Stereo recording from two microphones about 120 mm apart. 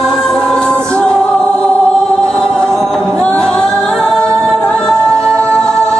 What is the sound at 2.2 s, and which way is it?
Singing, 5° left (ahead or behind).